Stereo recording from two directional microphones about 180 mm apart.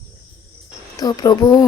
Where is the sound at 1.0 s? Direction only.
20° left (ahead or behind).